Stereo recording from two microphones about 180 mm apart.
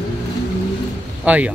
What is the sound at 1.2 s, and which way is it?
Speech, 5° right (ahead or behind).